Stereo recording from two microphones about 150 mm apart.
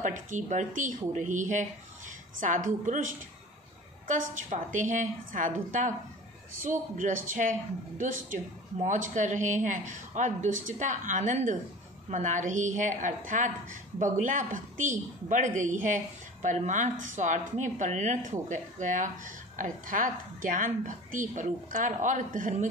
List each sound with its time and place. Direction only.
0.0 s speech: 60° right (ahead or behind)